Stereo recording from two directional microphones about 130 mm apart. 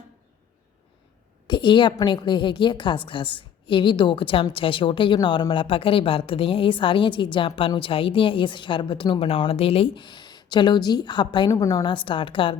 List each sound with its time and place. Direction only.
1.5 s a woman's voice: 35° left (ahead or behind)
11.5 s a woman's voice: 25° left (ahead or behind); by 12.5 s 40° left (ahead or behind)